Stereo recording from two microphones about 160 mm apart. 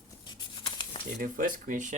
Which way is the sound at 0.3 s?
30° left (ahead or behind).